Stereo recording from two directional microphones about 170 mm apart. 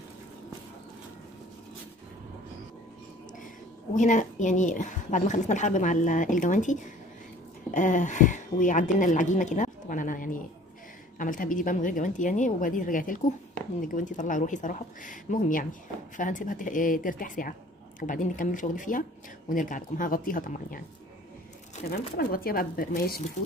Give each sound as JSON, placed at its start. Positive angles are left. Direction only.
{"t": 3.9, "sound": "a woman's voice", "side_deg": 45}
{"t": 22.1, "sound": "speech", "side_deg": 60}